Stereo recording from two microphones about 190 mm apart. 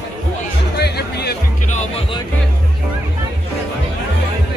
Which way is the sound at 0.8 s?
60° left (ahead or behind).